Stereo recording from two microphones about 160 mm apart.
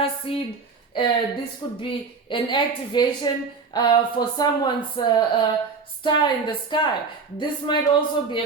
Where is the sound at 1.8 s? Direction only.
30° left (ahead or behind).